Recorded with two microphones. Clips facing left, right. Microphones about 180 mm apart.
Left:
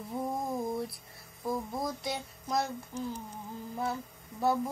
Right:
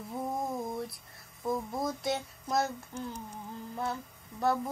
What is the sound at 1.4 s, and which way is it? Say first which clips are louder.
Child singing: right 1 dB; centre (ahead or behind).